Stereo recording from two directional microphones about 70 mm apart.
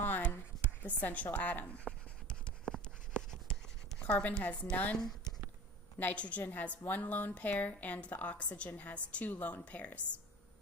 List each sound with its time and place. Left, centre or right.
0.0 s a sound: left
0.8 s writing: left
4.0 s a woman's voice: left